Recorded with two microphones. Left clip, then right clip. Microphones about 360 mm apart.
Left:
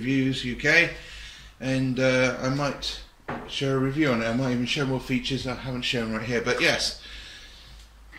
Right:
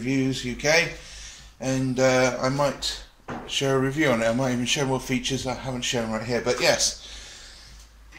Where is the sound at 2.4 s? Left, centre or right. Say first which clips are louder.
Right 4 dB; right.